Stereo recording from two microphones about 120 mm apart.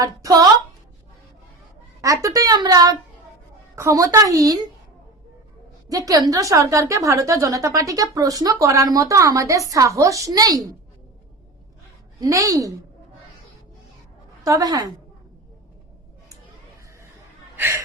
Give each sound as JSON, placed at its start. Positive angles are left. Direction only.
{"t": 0.0, "sound": "a woman's voice", "side_deg": -30}
{"t": 2.0, "sound": "a woman's voice", "side_deg": -30}
{"t": 5.9, "sound": "a woman's voice", "side_deg": -30}
{"t": 12.2, "sound": "a woman's voice", "side_deg": -30}
{"t": 14.4, "sound": "a woman's voice", "side_deg": -30}
{"t": 17.6, "sound": "speech", "side_deg": -20}